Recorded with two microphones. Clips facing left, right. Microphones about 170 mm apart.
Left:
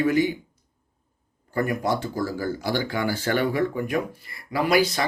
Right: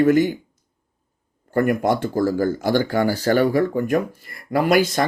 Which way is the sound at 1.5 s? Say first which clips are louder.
Right 6 dB; 55° right (ahead or behind).